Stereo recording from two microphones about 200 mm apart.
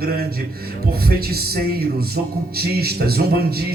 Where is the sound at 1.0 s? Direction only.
50° right (ahead or behind).